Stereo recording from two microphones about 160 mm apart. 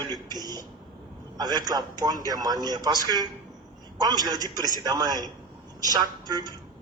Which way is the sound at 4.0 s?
25° right (ahead or behind).